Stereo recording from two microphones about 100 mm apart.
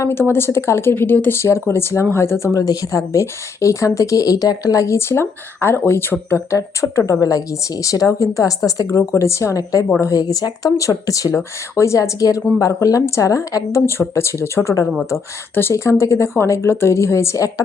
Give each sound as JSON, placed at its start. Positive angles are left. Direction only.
{"t": 0.0, "sound": "speech", "side_deg": 25}